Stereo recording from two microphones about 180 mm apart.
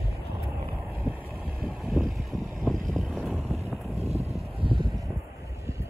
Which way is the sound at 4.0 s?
35° right (ahead or behind).